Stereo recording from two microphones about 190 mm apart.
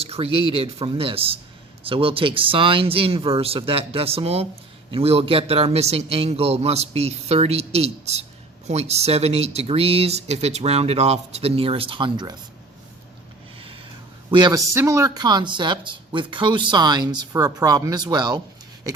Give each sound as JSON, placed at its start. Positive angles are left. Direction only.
{"t": 0.0, "sound": "a sound", "side_deg": -30}
{"t": 0.3, "sound": "speech", "side_deg": -30}
{"t": 14.3, "sound": "speech", "side_deg": -20}